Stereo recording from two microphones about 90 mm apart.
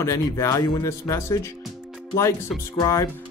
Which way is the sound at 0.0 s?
35° left (ahead or behind).